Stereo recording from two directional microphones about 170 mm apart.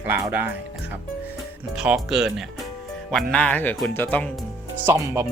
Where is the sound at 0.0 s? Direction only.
10° right (ahead or behind).